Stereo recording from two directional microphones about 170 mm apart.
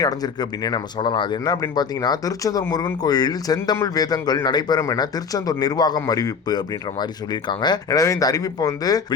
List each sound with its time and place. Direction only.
0.0 s speech: 20° left (ahead or behind)